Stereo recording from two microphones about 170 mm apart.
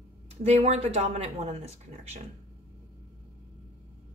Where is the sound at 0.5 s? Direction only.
40° right (ahead or behind).